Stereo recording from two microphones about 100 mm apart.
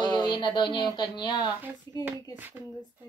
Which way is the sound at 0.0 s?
45° left (ahead or behind).